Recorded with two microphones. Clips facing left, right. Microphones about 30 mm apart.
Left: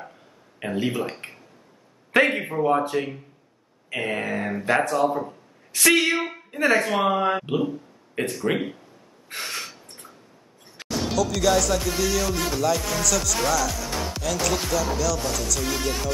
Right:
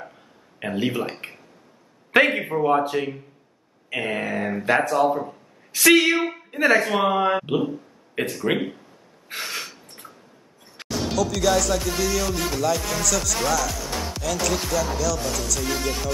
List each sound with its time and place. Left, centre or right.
0.0 s a sound: centre
0.8 s speech: centre
2.4 s a woman's voice: centre
9.4 s gasp: centre
10.9 s speech: centre